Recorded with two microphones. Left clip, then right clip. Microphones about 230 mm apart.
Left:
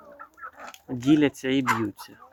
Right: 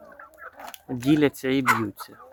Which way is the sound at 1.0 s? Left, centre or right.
Centre.